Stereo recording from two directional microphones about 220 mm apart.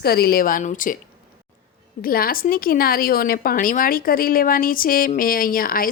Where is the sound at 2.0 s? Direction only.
40° left (ahead or behind).